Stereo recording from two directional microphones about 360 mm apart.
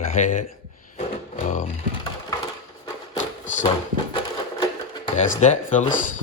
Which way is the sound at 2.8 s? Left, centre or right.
Centre.